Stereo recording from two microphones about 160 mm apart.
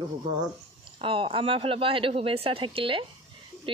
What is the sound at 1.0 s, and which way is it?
Speech, 35° right (ahead or behind).